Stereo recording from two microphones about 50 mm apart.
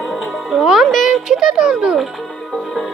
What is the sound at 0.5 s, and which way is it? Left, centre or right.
Music, centre.